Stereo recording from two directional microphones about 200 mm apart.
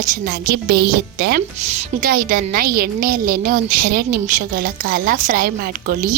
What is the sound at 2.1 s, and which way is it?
A woman's voice, 45° right (ahead or behind).